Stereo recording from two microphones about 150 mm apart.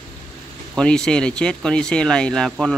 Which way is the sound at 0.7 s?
5° left (ahead or behind).